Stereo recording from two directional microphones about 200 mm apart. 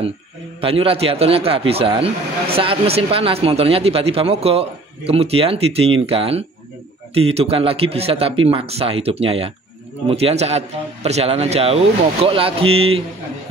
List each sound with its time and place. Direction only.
0.6 s speech: 30° right (ahead or behind)